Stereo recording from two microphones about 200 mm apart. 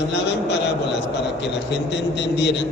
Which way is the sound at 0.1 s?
60° left (ahead or behind).